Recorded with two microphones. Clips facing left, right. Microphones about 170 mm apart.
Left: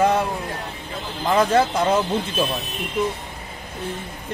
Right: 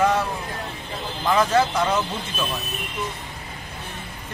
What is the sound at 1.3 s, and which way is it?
Speech, 30° left (ahead or behind).